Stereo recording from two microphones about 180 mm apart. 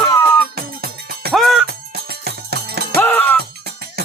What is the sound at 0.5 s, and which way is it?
Music, 55° right (ahead or behind).